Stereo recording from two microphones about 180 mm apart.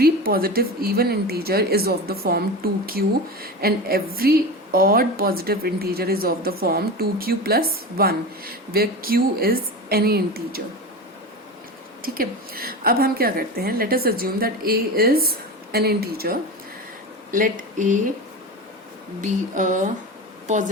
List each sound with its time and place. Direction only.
0.0 s a woman's voice: 55° right (ahead or behind)
12.0 s a woman's voice: 55° right (ahead or behind)
19.2 s a woman's voice: 45° right (ahead or behind)